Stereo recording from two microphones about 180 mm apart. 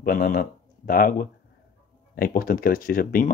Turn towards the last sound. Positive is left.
turn(degrees=50)  # may be behind; listen again after turning